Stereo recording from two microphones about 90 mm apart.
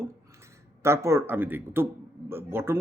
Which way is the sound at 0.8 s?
30° right (ahead or behind).